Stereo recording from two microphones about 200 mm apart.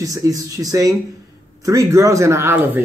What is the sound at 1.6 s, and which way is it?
Speech, 15° right (ahead or behind).